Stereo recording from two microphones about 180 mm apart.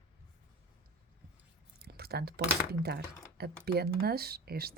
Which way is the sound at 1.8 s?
60° right (ahead or behind).